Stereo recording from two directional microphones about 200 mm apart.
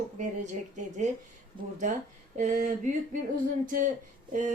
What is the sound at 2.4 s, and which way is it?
Speech, 40° right (ahead or behind).